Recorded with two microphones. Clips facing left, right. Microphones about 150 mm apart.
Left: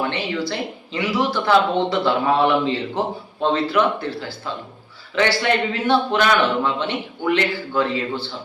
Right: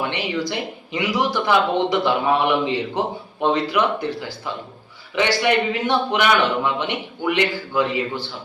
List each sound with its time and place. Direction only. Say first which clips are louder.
0.0 s speech: even; 15° right (ahead or behind)